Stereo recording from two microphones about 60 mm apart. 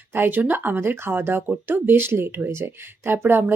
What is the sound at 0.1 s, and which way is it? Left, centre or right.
Speech, right.